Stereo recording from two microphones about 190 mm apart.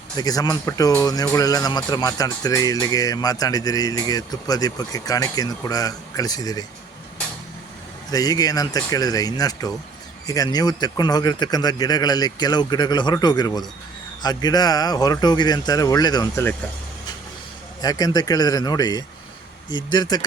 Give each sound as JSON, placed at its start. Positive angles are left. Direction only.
{"t": 0.2, "sound": "speech", "side_deg": 20}
{"t": 8.1, "sound": "speech", "side_deg": 20}
{"t": 17.8, "sound": "speech", "side_deg": 20}